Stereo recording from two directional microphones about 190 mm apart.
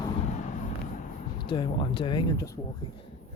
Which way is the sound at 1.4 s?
25° left (ahead or behind).